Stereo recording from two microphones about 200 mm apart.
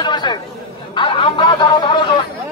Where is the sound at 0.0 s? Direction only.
20° left (ahead or behind).